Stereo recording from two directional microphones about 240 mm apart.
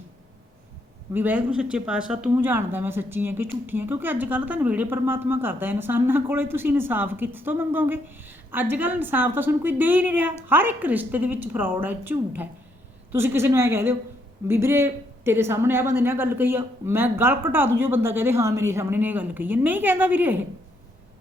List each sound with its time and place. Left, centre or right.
1.1 s speech: centre